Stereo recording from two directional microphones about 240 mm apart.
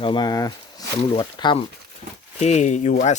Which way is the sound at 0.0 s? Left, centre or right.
Centre.